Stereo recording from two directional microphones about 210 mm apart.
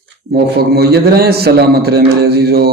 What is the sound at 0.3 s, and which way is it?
A man's voice, 50° right (ahead or behind).